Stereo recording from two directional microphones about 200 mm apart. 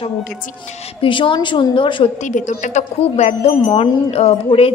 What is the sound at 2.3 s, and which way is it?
Speech, 40° left (ahead or behind).